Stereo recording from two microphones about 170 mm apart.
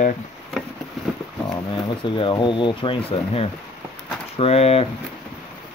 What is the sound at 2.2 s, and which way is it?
Speech, 30° left (ahead or behind).